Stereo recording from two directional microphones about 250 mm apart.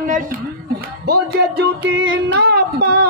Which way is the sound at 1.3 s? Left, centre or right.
Right.